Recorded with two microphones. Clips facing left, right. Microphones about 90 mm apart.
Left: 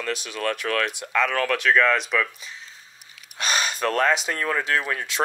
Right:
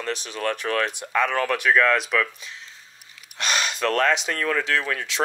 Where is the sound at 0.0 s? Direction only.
30° right (ahead or behind).